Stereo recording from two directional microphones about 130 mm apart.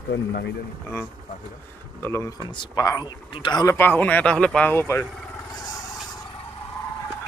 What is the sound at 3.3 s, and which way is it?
Speech, 40° left (ahead or behind).